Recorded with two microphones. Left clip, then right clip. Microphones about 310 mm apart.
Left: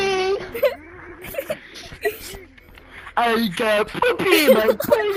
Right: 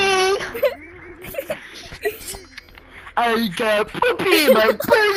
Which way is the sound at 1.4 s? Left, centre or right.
Centre.